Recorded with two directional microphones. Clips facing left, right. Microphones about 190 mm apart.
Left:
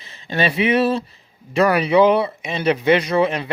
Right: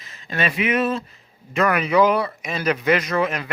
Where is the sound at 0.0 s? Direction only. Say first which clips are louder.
Left 4 dB; 30° left (ahead or behind).